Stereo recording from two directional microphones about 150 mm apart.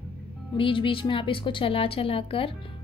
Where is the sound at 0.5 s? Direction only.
35° left (ahead or behind).